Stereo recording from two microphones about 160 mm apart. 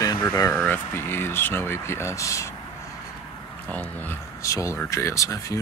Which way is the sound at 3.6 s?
10° left (ahead or behind).